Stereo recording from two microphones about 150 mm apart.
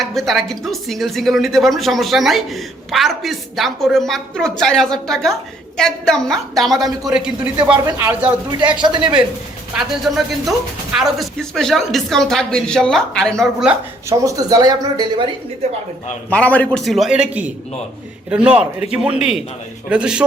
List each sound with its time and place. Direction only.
0.0 s a man's voice: centre (ahead or behind)
8.6 s speech: 30° right (ahead or behind)
9.7 s speech: centre (ahead or behind)
13.7 s speech: 20° right (ahead or behind)
16.3 s a man's voice: 10° left (ahead or behind); by 20.2 s 5° right (ahead or behind)